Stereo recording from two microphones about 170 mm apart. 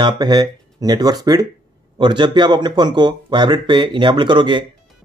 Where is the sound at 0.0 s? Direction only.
25° right (ahead or behind).